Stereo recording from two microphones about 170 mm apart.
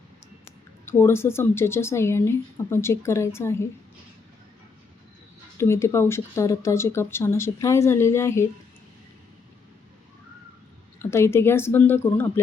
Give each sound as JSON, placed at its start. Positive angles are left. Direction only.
{"t": 0.9, "sound": "speech", "side_deg": 15}
{"t": 5.5, "sound": "speech", "side_deg": 15}
{"t": 11.0, "sound": "speech", "side_deg": 15}